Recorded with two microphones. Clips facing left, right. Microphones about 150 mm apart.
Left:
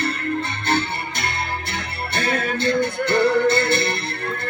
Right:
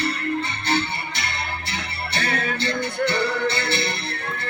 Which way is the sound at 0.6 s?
50° left (ahead or behind).